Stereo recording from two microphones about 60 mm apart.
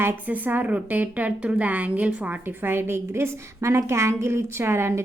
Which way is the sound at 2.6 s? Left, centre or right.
Right.